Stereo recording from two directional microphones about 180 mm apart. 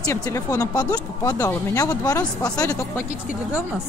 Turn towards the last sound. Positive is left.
turn(degrees=15)  # may be behind; listen again after turning